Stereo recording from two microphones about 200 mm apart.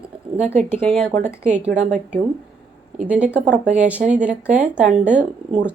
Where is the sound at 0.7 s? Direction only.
5° left (ahead or behind).